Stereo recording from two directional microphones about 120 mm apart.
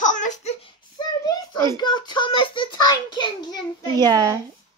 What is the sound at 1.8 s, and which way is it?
A child's voice, 40° left (ahead or behind).